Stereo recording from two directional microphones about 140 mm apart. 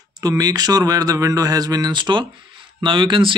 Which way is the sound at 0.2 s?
25° right (ahead or behind).